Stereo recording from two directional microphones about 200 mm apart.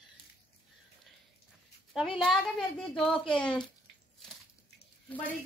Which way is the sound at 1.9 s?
Centre (ahead or behind).